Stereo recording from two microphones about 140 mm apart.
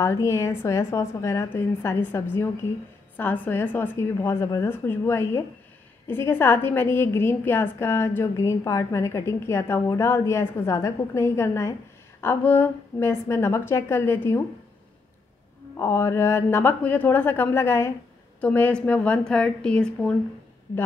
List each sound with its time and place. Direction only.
0.0 s a woman's voice: 20° left (ahead or behind)
15.8 s a woman's voice: 20° left (ahead or behind)